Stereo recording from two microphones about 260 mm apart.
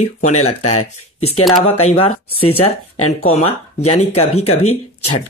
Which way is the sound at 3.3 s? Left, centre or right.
Left.